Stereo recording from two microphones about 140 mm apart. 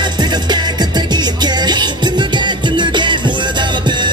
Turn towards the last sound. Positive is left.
turn(degrees=-35)  # may be behind; listen again after turning